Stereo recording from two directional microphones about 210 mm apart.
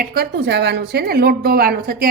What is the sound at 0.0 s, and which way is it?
A woman's voice, 45° right (ahead or behind).